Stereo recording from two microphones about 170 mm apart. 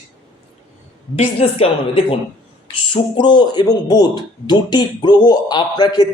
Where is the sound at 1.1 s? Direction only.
35° left (ahead or behind).